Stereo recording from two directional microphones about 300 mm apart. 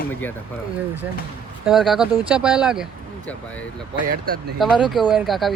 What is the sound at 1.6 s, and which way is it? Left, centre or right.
Speech, centre.